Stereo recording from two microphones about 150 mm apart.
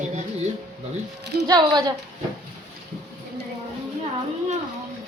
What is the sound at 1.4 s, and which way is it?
Speech, 25° right (ahead or behind).